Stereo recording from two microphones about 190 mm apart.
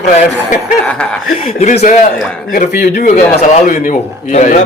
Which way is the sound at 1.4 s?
40° left (ahead or behind).